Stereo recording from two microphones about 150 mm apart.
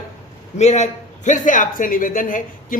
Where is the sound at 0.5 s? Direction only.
50° left (ahead or behind); by 2.8 s 65° left (ahead or behind).